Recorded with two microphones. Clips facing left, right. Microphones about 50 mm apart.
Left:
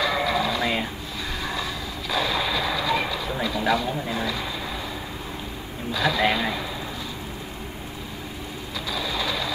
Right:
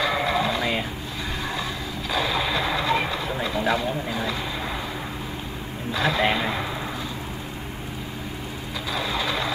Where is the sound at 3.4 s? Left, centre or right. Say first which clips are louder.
Left 1 dB; right.